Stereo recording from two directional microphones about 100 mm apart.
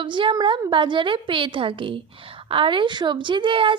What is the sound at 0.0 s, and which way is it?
A woman's voice, 55° right (ahead or behind).